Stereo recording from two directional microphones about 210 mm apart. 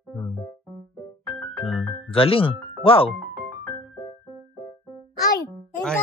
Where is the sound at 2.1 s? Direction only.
25° left (ahead or behind).